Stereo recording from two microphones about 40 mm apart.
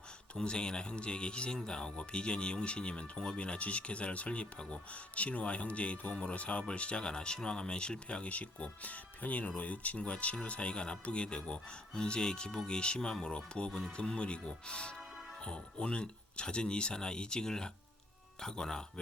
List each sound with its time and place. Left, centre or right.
0.3 s speech: left